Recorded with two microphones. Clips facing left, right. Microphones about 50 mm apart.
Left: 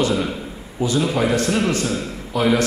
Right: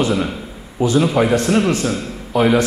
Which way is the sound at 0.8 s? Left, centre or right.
Right.